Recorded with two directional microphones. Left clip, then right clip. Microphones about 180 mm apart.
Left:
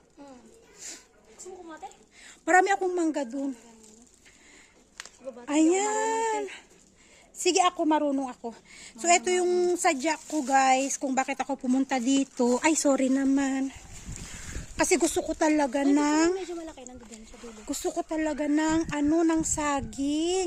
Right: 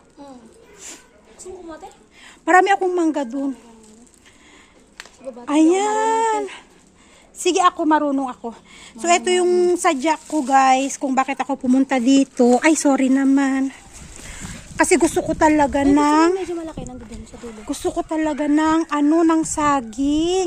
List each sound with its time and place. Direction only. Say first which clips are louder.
2.2 s a woman's voice: right 8 dB; 10° left (ahead or behind)
5.5 s a woman's voice: right 8 dB; 5° left (ahead or behind)
14.8 s speech: right 8 dB; centre (ahead or behind)
16.5 s a sound: right 10 dB; 40° right (ahead or behind)
17.7 s a woman's voice: right 7 dB; 10° left (ahead or behind)